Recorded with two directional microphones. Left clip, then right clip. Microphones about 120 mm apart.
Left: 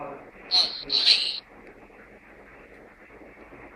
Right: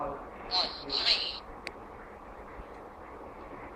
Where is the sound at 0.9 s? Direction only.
50° left (ahead or behind).